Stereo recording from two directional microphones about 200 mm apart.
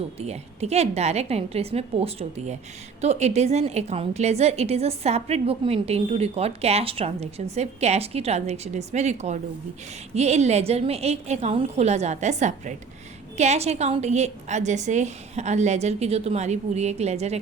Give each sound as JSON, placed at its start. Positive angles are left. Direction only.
{"t": 0.2, "sound": "a woman's voice", "side_deg": -30}